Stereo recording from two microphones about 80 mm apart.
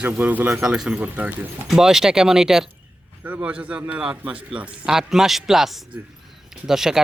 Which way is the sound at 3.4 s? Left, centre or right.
Centre.